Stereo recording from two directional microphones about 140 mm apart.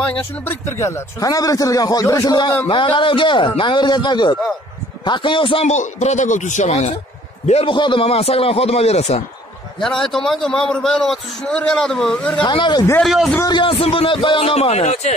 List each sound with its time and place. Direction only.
0.1 s a man's voice: 15° left (ahead or behind); by 5.7 s 40° left (ahead or behind)
5.7 s a man's voice: 55° left (ahead or behind)
7.7 s a man's voice: 35° left (ahead or behind)
9.8 s a man's voice: 5° left (ahead or behind)
12.4 s a man's voice: 35° left (ahead or behind)
13.0 s a man's voice: centre (ahead or behind)
13.5 s a man's voice: 35° left (ahead or behind); by 15.1 s 55° left (ahead or behind)